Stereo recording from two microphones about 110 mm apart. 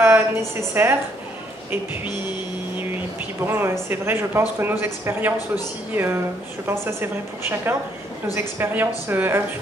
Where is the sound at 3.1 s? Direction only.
20° right (ahead or behind).